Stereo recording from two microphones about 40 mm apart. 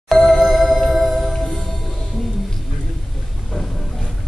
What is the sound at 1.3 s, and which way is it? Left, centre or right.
Music, centre.